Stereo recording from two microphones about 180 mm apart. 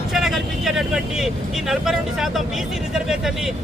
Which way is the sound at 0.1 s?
Centre (ahead or behind).